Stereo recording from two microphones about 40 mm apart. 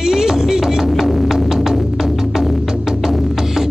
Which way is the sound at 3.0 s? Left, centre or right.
Centre.